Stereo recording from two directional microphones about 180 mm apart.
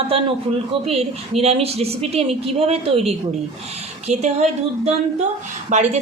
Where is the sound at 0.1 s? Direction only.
30° right (ahead or behind).